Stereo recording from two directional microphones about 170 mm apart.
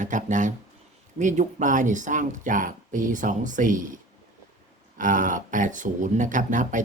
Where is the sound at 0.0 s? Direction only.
45° right (ahead or behind).